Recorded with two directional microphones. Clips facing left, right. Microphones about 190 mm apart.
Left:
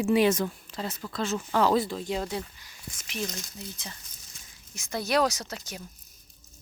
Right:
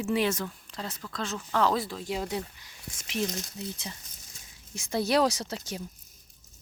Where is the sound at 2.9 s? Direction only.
25° right (ahead or behind).